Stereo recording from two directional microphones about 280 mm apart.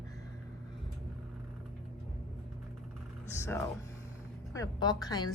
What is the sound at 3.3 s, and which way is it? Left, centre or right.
A woman's voice, centre.